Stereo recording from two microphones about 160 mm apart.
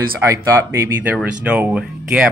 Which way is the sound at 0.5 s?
15° right (ahead or behind).